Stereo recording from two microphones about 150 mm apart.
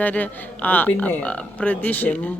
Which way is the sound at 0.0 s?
10° left (ahead or behind).